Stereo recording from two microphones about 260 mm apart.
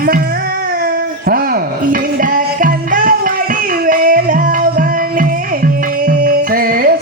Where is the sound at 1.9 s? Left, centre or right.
Right.